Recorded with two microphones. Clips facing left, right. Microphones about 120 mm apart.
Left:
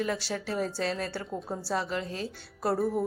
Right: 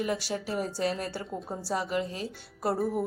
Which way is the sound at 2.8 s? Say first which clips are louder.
Left 1 dB; 5° right (ahead or behind).